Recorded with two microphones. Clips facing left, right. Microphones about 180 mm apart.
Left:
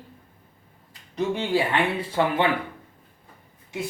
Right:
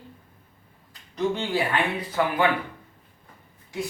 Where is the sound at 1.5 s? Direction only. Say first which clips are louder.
Left 2 dB; 25° left (ahead or behind).